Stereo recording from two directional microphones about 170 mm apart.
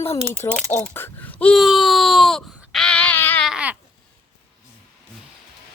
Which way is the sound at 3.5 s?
5° right (ahead or behind).